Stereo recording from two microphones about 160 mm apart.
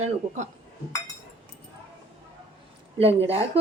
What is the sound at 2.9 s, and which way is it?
Speech, 40° right (ahead or behind).